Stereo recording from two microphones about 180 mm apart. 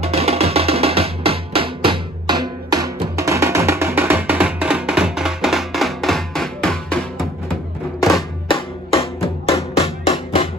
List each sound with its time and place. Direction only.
0.0 s music: 35° right (ahead or behind); by 7.2 s 5° left (ahead or behind)
8.1 s music: 30° left (ahead or behind)